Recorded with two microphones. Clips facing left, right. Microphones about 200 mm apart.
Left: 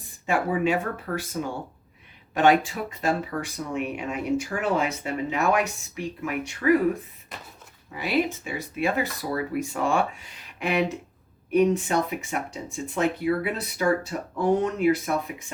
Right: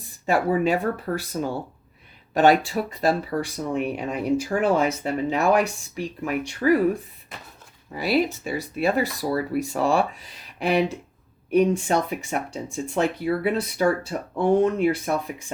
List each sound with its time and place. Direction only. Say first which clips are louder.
0.3 s speech: right 3 dB; 35° right (ahead or behind)
7.9 s speech: right 3 dB; 35° right (ahead or behind)